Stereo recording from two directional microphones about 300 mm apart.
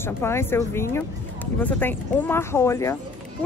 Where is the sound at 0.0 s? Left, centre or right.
Centre.